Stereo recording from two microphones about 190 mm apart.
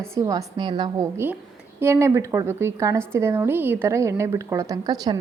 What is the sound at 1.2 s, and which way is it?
A woman's voice, 10° right (ahead or behind).